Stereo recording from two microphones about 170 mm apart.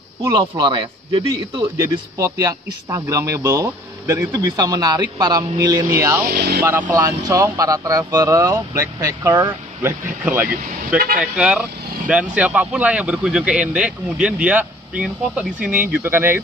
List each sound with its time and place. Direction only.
0.3 s a man's voice: 25° right (ahead or behind)
6.3 s vehicle: 80° right
7.0 s a man's voice: 20° right (ahead or behind)
10.2 s speech: 10° right (ahead or behind)